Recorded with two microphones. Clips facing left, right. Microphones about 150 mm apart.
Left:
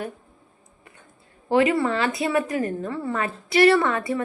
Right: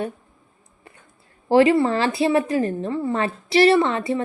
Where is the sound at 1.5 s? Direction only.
30° right (ahead or behind).